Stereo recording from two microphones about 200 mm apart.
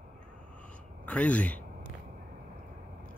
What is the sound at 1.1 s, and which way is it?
Speech, 5° left (ahead or behind).